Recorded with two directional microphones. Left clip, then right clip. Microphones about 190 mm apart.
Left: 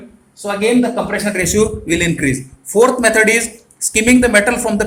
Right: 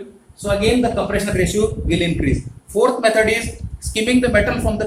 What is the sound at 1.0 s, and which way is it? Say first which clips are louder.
Speech: left 2 dB; 35° left (ahead or behind).